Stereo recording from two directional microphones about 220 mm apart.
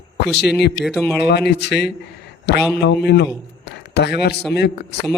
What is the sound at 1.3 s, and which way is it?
A man's voice, 50° left (ahead or behind).